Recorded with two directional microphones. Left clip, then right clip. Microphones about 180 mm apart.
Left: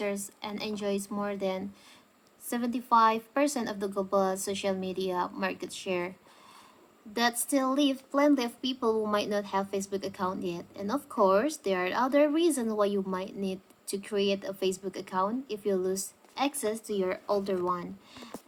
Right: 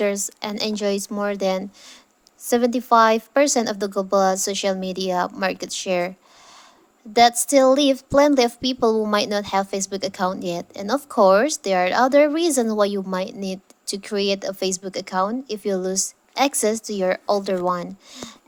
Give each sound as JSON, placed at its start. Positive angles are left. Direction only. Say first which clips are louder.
{"t": 0.0, "sound": "a woman's voice", "louder": "right 11 dB", "side_deg": -45}